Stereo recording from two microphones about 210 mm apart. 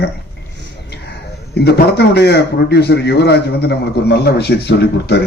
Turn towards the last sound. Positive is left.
turn(degrees=55)  # may be behind; listen again after turning